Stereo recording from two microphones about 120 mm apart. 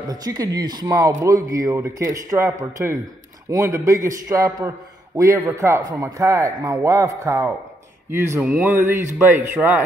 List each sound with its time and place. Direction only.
0.1 s a man's voice: 30° right (ahead or behind)